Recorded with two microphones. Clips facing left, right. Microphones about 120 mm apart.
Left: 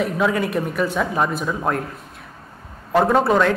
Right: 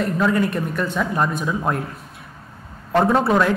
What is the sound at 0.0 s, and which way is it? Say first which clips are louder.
Speech: right 1 dB; centre (ahead or behind).